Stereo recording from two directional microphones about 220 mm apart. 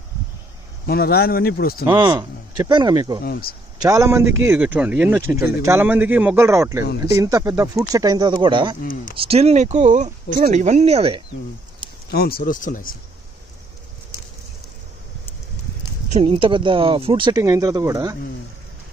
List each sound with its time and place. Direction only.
0.8 s speech: 45° left (ahead or behind)
1.9 s speech: 20° right (ahead or behind)
3.3 s speech: 45° left (ahead or behind)
3.8 s speech: 15° right (ahead or behind)
12.1 s speech: 45° left (ahead or behind)
16.1 s speech: 25° right (ahead or behind)